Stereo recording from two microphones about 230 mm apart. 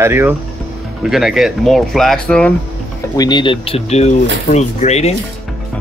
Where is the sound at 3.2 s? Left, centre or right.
Centre.